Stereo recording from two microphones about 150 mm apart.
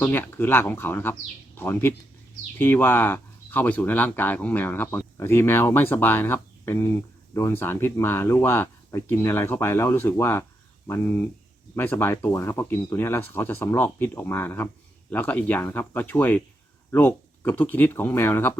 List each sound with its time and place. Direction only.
0.0 s speech: 15° left (ahead or behind)